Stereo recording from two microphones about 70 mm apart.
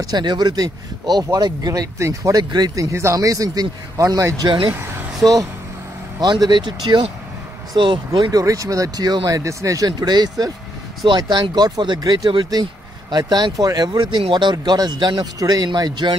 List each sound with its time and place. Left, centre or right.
0.0 s speech: right
2.3 s speech: right
2.7 s speech: right
6.2 s speech: right
7.7 s speech: right
9.4 s speech: right
9.8 s speech: right
11.1 s speech: right
13.3 s speech: right
13.7 s speech: right